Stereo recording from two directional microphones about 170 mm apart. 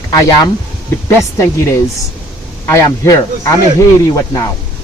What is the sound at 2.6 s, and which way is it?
Speech, 20° left (ahead or behind).